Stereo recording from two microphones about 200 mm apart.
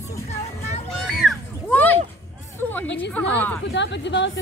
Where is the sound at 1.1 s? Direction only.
Centre (ahead or behind).